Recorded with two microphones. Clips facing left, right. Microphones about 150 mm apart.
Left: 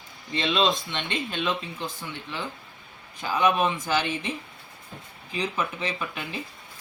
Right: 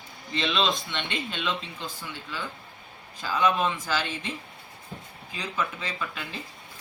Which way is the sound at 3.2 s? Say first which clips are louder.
Left 2 dB; 15° left (ahead or behind).